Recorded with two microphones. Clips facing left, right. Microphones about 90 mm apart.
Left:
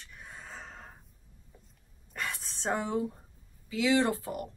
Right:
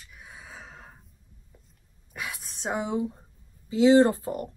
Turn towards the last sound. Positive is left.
turn(degrees=-35)  # may be behind; listen again after turning